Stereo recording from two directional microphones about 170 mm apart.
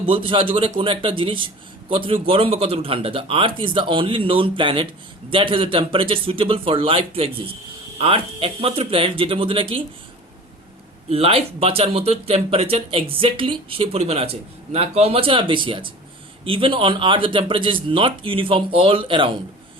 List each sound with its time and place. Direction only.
0.0 s speech: 30° right (ahead or behind)
11.1 s speech: 35° right (ahead or behind)